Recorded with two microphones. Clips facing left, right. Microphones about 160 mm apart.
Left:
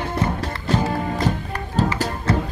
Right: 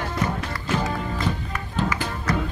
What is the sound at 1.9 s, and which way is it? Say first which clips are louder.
Music: left 4 dB; 30° left (ahead or behind).